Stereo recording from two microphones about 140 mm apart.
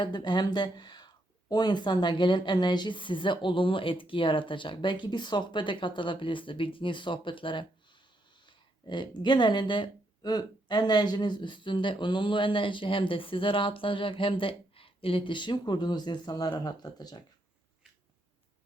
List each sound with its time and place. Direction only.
0.0 s speech: 30° left (ahead or behind)